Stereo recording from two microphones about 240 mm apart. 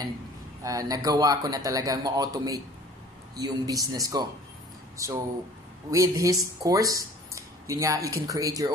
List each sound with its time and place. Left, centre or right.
0.7 s speech: centre